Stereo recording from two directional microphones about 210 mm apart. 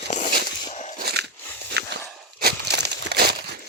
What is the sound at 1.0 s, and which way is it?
Biting, 50° right (ahead or behind).